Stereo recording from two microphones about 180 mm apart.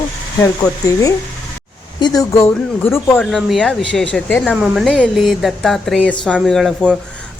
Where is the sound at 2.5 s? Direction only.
10° left (ahead or behind).